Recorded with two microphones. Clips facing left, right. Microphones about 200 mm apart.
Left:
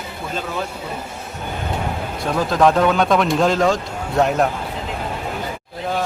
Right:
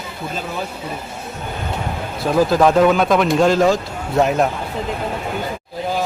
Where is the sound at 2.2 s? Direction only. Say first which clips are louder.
Right 2 dB; 5° right (ahead or behind).